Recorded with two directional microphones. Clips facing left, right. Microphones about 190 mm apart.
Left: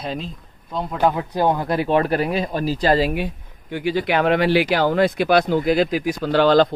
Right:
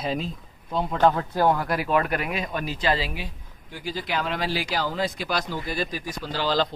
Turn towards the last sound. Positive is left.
turn(degrees=60)  # may be behind; listen again after turning